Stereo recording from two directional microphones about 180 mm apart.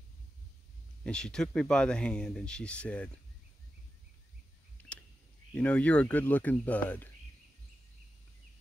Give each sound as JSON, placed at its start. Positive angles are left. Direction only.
{"t": 1.0, "sound": "speech", "side_deg": 5}
{"t": 4.8, "sound": "a sound", "side_deg": 5}
{"t": 5.5, "sound": "speech", "side_deg": 5}